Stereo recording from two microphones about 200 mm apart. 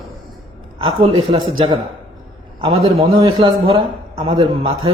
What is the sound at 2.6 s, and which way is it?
A man's voice, 25° right (ahead or behind).